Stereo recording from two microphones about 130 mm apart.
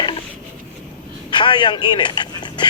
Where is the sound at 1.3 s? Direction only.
35° left (ahead or behind).